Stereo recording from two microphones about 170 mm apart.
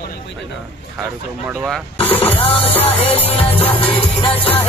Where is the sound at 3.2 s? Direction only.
35° left (ahead or behind).